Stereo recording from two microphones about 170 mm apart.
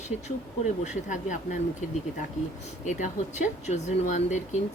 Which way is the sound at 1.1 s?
50° left (ahead or behind).